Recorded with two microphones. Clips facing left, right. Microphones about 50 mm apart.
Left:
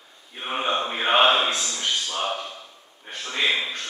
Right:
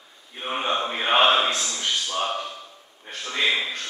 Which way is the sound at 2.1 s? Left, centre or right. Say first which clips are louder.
Right 1 dB; centre.